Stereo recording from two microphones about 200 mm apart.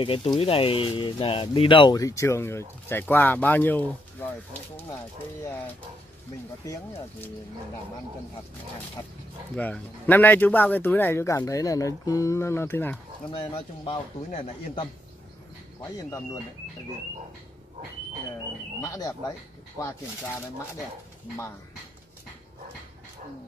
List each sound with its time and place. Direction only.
0.0 s speech: 25° left (ahead or behind); by 4.3 s 10° left (ahead or behind)
6.6 s speech: 15° left (ahead or behind)
9.6 s speech: 10° left (ahead or behind)
13.3 s speech: 30° left (ahead or behind)
15.8 s speech: 15° left (ahead or behind)
18.8 s speech: 15° left (ahead or behind)